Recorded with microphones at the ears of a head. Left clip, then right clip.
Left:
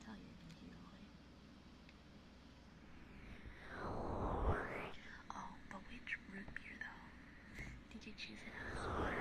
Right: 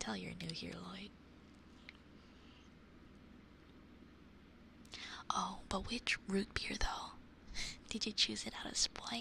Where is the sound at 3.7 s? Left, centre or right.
Left.